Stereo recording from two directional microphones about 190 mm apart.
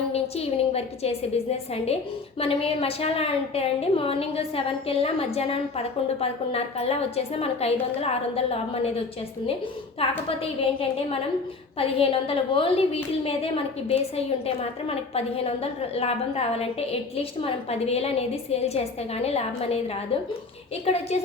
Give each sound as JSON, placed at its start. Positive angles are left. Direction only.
{"t": 0.1, "sound": "a woman's voice", "side_deg": 30}
{"t": 10.0, "sound": "a woman's voice", "side_deg": 30}
{"t": 20.8, "sound": "a woman's voice", "side_deg": 35}